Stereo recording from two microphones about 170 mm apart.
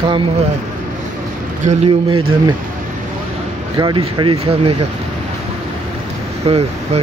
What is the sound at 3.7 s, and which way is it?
Speech, 30° right (ahead or behind).